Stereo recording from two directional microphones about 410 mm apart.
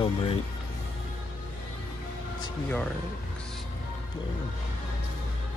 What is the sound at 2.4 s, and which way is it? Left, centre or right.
Speech, centre.